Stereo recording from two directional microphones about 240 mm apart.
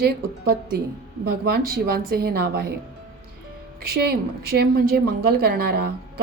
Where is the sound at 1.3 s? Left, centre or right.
Right.